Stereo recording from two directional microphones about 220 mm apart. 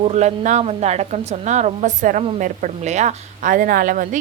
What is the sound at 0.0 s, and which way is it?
A woman's voice, 30° right (ahead or behind).